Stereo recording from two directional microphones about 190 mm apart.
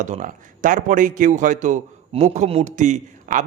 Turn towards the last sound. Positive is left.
turn(degrees=-40)  # may be behind; listen again after turning